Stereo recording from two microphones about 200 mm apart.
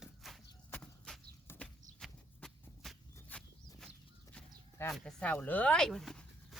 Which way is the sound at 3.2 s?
10° left (ahead or behind).